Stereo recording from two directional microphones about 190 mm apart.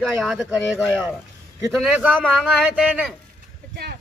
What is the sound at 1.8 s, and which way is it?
Speech, 5° right (ahead or behind).